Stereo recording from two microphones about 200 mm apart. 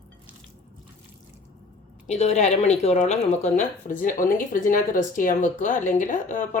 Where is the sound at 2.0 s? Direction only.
35° left (ahead or behind).